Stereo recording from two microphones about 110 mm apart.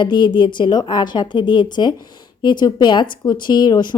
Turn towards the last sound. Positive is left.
turn(degrees=40)  # may be behind; listen again after turning